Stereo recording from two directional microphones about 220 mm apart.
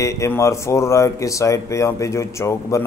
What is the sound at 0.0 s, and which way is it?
A man's voice, 15° left (ahead or behind).